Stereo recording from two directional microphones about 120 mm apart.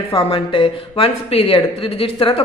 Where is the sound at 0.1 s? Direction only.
45° left (ahead or behind).